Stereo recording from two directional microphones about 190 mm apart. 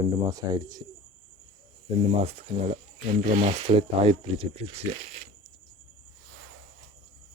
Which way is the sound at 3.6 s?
30° right (ahead or behind).